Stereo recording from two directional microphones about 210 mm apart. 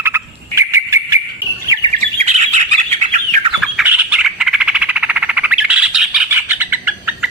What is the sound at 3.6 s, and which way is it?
Squawk, 5° right (ahead or behind).